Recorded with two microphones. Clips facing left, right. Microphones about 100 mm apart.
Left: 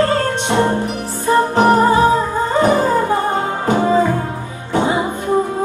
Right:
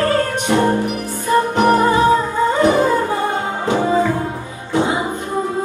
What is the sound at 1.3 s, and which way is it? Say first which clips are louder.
Music: left 2 dB; 35° left (ahead or behind).